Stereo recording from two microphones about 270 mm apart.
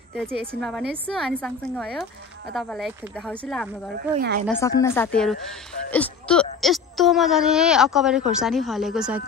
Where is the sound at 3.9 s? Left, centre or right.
Right.